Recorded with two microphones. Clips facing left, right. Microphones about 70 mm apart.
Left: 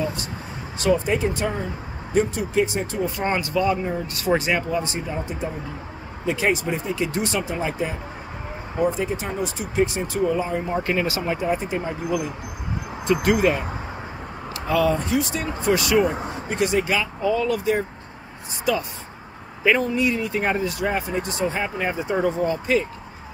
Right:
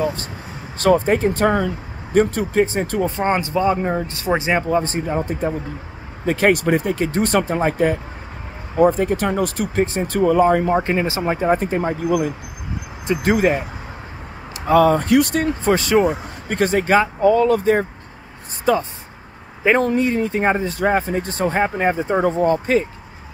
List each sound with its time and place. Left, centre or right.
0.7 s speech: right
3.2 s speech: right
3.7 s speech: right
4.1 s speech: right
4.6 s speech: right
10.8 s speech: right
11.6 s speech: right
13.0 s speech: right
14.7 s speech: right
15.6 s speech: right
20.0 s speech: right